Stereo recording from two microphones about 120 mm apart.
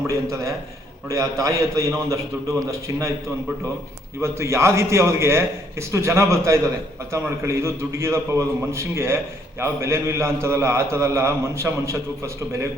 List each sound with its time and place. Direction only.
0.1 s a man's voice: 25° right (ahead or behind)
4.2 s a man's voice: 25° right (ahead or behind)